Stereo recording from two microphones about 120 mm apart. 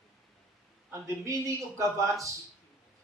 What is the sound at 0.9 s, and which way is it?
A man's voice, 25° right (ahead or behind).